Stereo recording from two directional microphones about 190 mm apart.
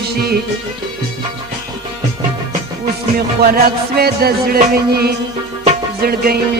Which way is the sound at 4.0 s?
55° right (ahead or behind).